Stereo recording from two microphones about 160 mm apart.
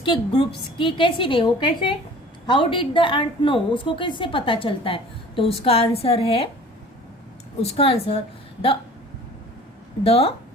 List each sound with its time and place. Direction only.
0.0 s a woman's voice: 30° left (ahead or behind)
7.6 s a woman's voice: 35° left (ahead or behind)
10.0 s a woman's voice: 35° left (ahead or behind)